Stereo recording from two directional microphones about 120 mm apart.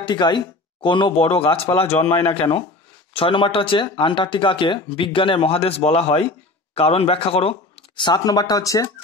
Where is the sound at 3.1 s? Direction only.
50° left (ahead or behind).